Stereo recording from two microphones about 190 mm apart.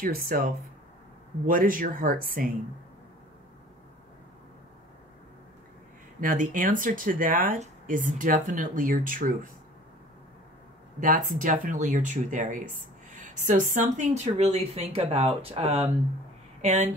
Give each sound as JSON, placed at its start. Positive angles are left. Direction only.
{"t": 0.0, "sound": "speech", "side_deg": -50}
{"t": 6.2, "sound": "speech", "side_deg": -45}
{"t": 11.0, "sound": "speech", "side_deg": -45}